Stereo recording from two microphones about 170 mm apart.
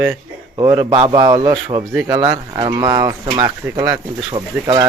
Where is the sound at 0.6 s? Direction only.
20° right (ahead or behind).